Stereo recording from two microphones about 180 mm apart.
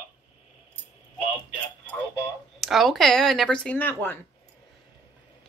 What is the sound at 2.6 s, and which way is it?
Speech, centre (ahead or behind).